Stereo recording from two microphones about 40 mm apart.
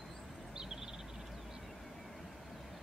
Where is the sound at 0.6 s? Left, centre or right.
Centre.